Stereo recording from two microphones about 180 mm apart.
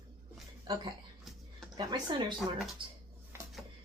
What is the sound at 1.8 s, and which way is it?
Speech, 25° right (ahead or behind).